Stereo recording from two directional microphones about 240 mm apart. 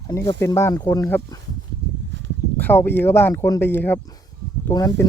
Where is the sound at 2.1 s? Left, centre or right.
Right.